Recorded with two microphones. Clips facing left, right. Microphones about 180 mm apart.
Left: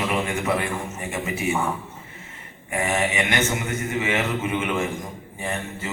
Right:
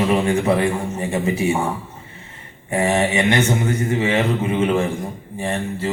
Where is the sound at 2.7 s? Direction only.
30° right (ahead or behind).